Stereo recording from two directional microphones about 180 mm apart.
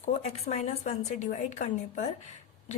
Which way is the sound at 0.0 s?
35° left (ahead or behind).